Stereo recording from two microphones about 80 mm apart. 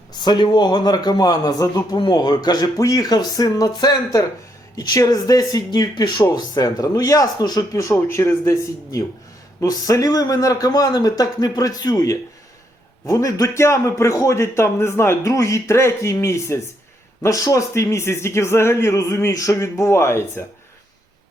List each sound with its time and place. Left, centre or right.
0.1 s speech: left
2.0 s speech: left
6.3 s a man's voice: left
7.8 s a man's voice: left